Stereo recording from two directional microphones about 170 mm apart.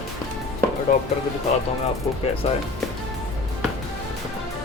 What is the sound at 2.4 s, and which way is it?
Speech, 35° left (ahead or behind).